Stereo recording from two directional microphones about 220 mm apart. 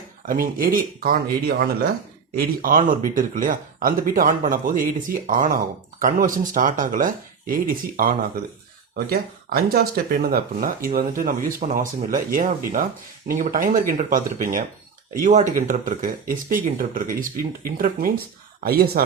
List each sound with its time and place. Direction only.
0.3 s speech: 40° right (ahead or behind)